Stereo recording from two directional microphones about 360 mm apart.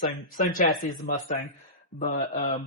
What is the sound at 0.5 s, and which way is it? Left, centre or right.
A man's voice, left.